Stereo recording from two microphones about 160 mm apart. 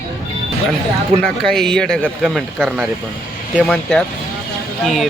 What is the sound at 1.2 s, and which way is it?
Speech, 5° left (ahead or behind).